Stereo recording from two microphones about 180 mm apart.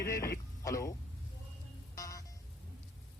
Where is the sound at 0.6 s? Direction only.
15° left (ahead or behind).